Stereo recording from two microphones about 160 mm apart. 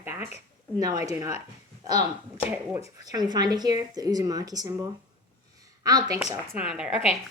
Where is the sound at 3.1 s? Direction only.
25° right (ahead or behind).